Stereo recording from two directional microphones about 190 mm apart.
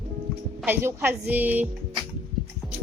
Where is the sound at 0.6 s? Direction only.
10° right (ahead or behind).